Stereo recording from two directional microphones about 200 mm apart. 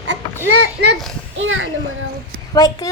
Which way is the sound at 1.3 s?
75° right (ahead or behind).